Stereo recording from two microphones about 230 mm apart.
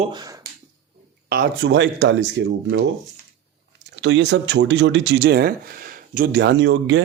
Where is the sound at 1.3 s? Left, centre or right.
Right.